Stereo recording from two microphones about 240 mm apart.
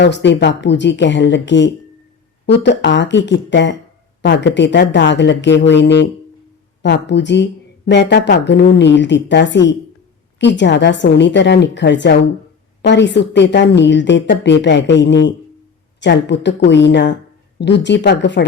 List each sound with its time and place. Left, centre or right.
0.0 s a woman's voice: left